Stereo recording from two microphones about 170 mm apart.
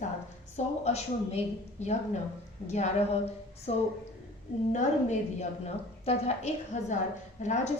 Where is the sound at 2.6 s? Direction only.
40° left (ahead or behind).